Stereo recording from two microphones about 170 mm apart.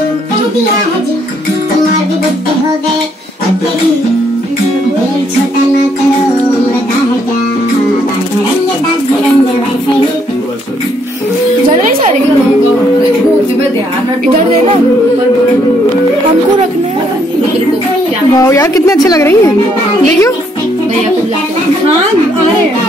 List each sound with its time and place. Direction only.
18.3 s speech: 20° left (ahead or behind)